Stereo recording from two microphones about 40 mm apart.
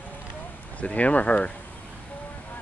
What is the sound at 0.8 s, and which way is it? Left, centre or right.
Speech, left.